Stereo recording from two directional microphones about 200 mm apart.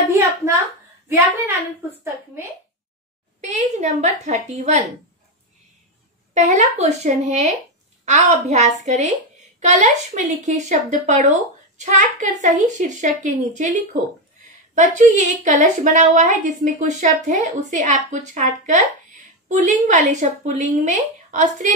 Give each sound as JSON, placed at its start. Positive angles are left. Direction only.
{"t": 1.0, "sound": "speech", "side_deg": -10}
{"t": 3.3, "sound": "a woman's voice", "side_deg": -35}
{"t": 6.3, "sound": "a woman's voice", "side_deg": -35}